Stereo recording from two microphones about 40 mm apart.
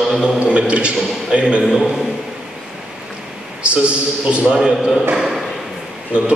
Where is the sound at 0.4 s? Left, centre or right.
Right.